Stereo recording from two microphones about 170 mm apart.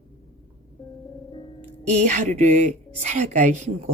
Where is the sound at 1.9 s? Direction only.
45° right (ahead or behind).